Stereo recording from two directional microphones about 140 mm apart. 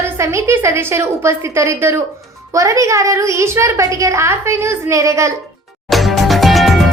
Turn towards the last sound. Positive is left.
turn(degrees=0)  # may be behind; listen again after turning